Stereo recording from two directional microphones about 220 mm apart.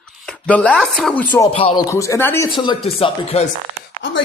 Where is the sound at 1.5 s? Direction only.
25° left (ahead or behind).